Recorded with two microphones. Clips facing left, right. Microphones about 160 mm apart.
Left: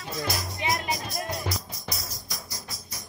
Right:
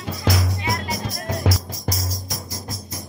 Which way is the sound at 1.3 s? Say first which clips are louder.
Right 12 dB; 90° right.